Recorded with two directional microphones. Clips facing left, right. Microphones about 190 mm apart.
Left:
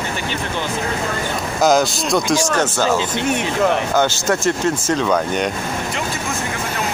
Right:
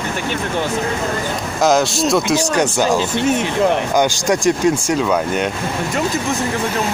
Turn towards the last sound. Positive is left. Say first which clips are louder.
# right 1 dB
turn(degrees=-5)  # may be behind; listen again after turning